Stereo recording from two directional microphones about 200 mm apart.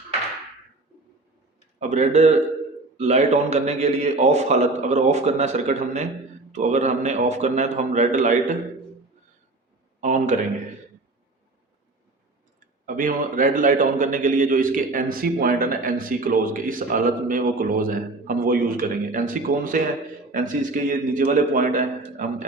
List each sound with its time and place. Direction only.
1.8 s a man's voice: 35° right (ahead or behind)
10.0 s a sound: 35° right (ahead or behind)
12.8 s a man's voice: 45° right (ahead or behind)